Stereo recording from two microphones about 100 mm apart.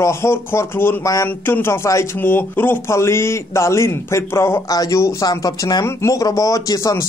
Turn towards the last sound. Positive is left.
turn(degrees=35)  # may be behind; listen again after turning